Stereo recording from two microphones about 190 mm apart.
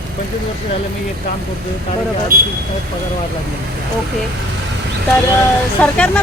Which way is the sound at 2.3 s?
50° right (ahead or behind).